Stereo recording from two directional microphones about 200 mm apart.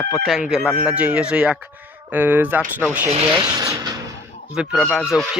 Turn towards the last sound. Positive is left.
turn(degrees=0)  # may be behind; listen again after turning